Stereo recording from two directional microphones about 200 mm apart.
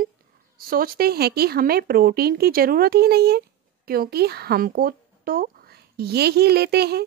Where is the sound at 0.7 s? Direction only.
50° right (ahead or behind).